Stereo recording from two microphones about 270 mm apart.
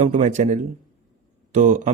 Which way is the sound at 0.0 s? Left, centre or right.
Right.